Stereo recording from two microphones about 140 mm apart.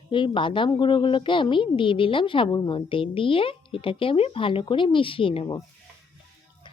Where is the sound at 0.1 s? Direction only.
35° left (ahead or behind).